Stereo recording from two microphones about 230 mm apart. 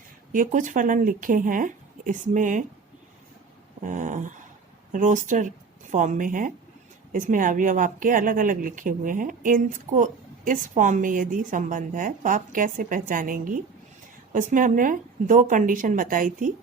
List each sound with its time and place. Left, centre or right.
0.3 s speech: right
3.8 s speech: right